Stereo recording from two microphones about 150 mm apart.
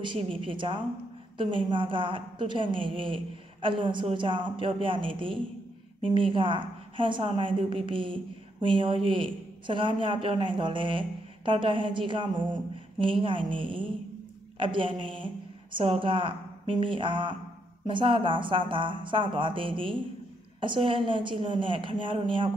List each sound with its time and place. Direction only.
0.0 s a woman's voice: 35° right (ahead or behind)